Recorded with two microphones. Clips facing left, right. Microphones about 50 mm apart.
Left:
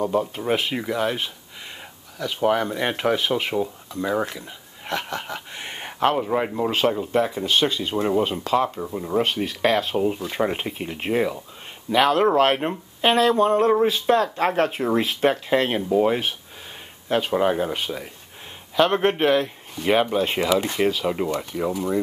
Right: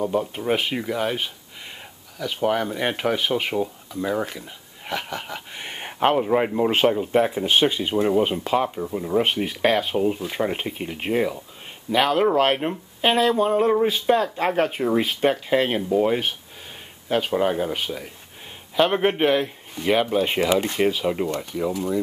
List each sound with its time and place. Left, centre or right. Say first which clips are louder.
0.0 s speech: left 1 dB; centre
7.9 s speech: right 2 dB; centre
8.2 s speech: even; centre
8.9 s speech: right 3 dB; centre
9.2 s speech: left 1 dB; centre
21.7 s speech: left 2 dB; left